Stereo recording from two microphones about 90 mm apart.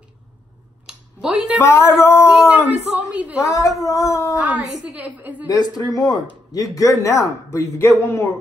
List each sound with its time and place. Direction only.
0.8 s a sound: 10° right (ahead or behind)
1.6 s speech: 30° left (ahead or behind)
2.5 s a woman's voice: 10° right (ahead or behind)
3.5 s speech: 35° left (ahead or behind)
4.8 s a woman's voice: 15° right (ahead or behind)
5.5 s speech: 40° left (ahead or behind)